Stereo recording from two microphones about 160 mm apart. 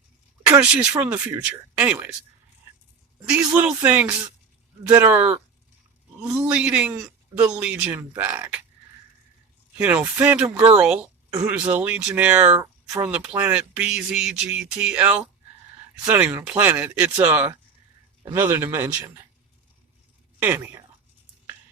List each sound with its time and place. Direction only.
0.4 s speech: 10° right (ahead or behind)
3.2 s speech: 10° right (ahead or behind)
6.2 s speech: 5° right (ahead or behind)
9.7 s speech: 10° right (ahead or behind)
11.3 s speech: 20° right (ahead or behind)
11.5 s speech: 10° right (ahead or behind)
20.4 s speech: 10° right (ahead or behind)